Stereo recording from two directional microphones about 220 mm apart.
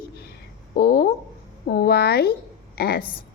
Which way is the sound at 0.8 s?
40° left (ahead or behind).